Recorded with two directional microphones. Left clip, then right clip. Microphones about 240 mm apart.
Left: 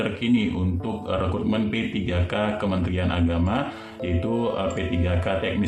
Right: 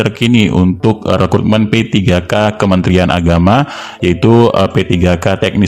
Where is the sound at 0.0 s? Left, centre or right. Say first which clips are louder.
Right 12 dB; right.